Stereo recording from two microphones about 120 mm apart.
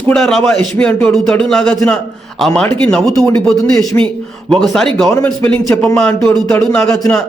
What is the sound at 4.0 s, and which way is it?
Speech, 15° left (ahead or behind).